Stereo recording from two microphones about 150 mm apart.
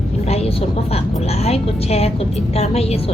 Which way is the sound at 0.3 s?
45° left (ahead or behind).